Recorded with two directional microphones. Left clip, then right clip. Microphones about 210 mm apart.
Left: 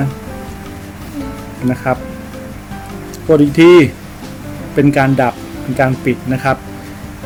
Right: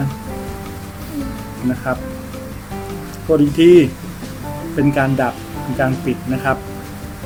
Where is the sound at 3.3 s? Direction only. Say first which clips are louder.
Left 3 dB; 30° left (ahead or behind).